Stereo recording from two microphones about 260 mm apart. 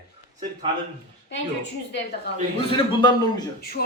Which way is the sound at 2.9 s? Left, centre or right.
Centre.